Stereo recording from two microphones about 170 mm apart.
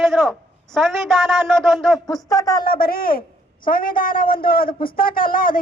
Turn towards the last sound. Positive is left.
turn(degrees=55)  # may be behind; listen again after turning